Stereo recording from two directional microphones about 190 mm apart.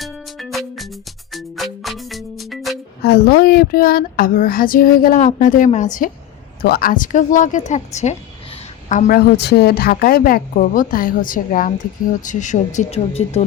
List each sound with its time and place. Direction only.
0.0 s music: centre (ahead or behind)
3.0 s speech: 55° left (ahead or behind)
6.6 s a woman's voice: 50° left (ahead or behind)
9.1 s speech: 60° left (ahead or behind); by 13.4 s 35° left (ahead or behind)